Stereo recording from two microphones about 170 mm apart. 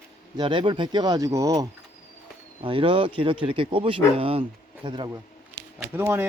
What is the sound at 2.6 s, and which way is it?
Speech, 30° right (ahead or behind).